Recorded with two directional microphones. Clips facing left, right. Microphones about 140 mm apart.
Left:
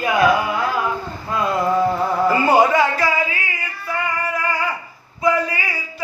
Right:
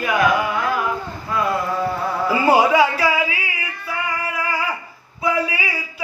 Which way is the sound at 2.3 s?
5° right (ahead or behind).